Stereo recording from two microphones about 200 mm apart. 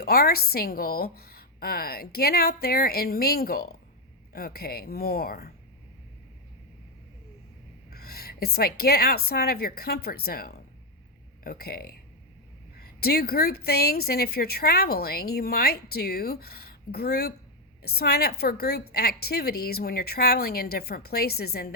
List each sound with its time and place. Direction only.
0.0 s a woman's voice: 50° left (ahead or behind)
7.9 s a woman's voice: 50° left (ahead or behind)
13.0 s a woman's voice: 50° left (ahead or behind)